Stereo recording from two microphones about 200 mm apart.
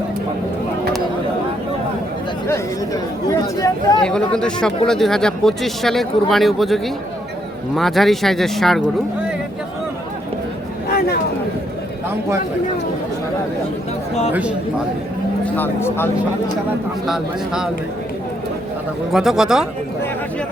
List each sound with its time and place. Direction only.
2.5 s speech: 15° left (ahead or behind)
4.0 s speech: 5° left (ahead or behind)
15.5 s speech: 10° left (ahead or behind)
17.1 s speech: 5° right (ahead or behind)
19.1 s speech: centre (ahead or behind)